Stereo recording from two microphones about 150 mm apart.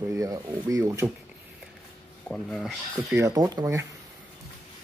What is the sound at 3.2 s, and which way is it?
Speech, 25° right (ahead or behind).